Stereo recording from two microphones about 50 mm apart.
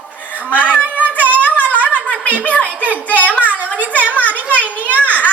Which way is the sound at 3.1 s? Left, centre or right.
Left.